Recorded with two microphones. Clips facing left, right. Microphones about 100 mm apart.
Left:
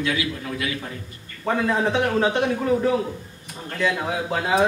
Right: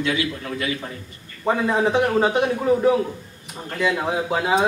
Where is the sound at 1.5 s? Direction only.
10° right (ahead or behind).